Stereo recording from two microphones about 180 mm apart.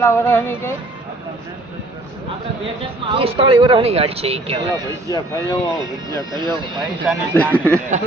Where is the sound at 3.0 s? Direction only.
30° right (ahead or behind).